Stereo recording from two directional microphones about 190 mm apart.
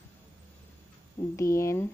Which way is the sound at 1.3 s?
15° left (ahead or behind).